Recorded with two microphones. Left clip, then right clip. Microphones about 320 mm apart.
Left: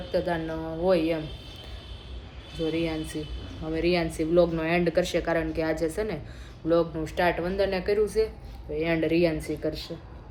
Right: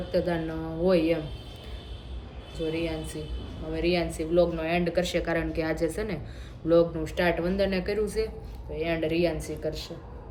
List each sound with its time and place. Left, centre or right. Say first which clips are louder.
0.1 s a woman's voice: left 1 dB; centre
2.7 s a woman's voice: left 2 dB; centre
8.7 s speech: left 3 dB; centre